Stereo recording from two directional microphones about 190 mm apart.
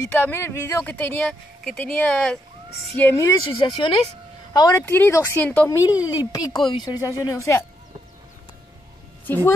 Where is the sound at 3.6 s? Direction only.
25° left (ahead or behind).